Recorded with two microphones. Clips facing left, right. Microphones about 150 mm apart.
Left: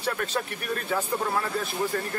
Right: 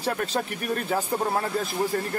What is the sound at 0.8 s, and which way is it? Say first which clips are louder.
Speech: right 1 dB; 35° right (ahead or behind).